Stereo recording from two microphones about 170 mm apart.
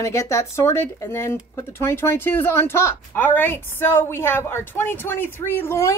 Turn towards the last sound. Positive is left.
turn(degrees=15)  # may be behind; listen again after turning